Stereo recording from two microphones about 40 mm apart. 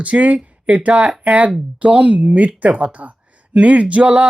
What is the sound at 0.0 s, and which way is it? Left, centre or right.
Speech, right.